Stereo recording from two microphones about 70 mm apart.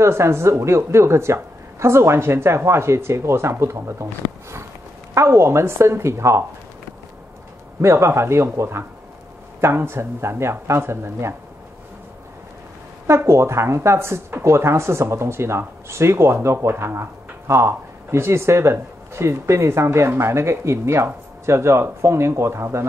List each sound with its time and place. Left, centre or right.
0.0 s speech: right
7.8 s speech: right
13.0 s speech: right